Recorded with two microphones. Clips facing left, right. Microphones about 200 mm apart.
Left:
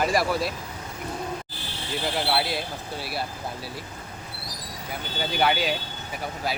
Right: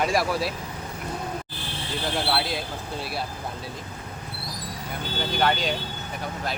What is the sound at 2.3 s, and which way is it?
Speech, 5° left (ahead or behind).